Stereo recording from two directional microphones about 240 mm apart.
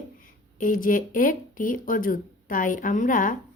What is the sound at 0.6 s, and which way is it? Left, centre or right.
A woman's voice, left.